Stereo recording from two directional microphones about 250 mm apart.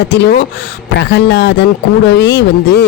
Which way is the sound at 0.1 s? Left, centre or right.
Left.